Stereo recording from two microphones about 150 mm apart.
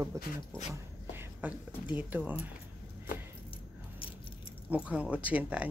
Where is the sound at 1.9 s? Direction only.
10° right (ahead or behind).